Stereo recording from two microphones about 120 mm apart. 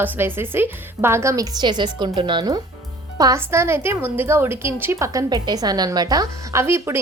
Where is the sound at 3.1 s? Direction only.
30° right (ahead or behind).